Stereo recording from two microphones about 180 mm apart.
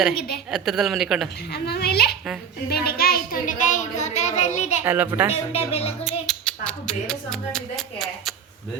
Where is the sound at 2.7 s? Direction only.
60° left (ahead or behind); by 4.8 s 40° left (ahead or behind).